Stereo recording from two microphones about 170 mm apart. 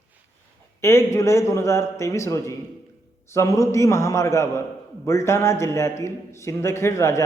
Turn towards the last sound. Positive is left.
turn(degrees=15)  # may be behind; listen again after turning